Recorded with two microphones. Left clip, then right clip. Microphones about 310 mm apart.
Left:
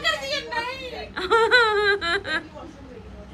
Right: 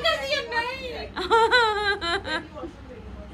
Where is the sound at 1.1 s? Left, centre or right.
Centre.